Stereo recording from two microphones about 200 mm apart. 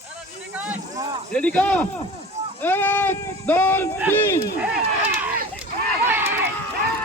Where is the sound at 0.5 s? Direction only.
10° right (ahead or behind).